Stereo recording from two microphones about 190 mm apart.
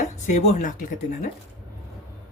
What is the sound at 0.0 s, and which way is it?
Speech, 40° left (ahead or behind).